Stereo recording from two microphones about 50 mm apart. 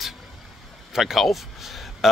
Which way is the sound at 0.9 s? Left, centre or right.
Centre.